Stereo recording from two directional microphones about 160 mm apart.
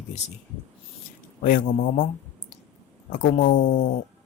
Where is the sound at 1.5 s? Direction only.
55° left (ahead or behind).